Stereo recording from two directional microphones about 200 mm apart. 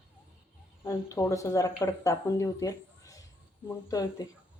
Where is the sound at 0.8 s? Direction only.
15° left (ahead or behind).